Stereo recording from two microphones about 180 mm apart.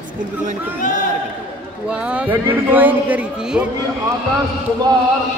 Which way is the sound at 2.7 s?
10° right (ahead or behind).